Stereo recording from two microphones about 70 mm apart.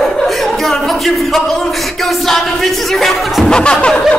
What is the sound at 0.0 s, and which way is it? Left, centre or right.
Speech, centre.